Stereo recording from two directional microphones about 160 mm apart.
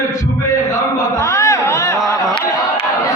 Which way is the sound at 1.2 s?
20° left (ahead or behind).